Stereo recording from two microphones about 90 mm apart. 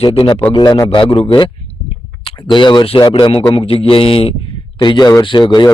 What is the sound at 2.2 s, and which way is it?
Speech, 65° left (ahead or behind).